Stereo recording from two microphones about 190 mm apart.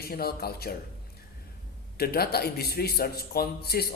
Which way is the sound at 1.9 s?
55° left (ahead or behind).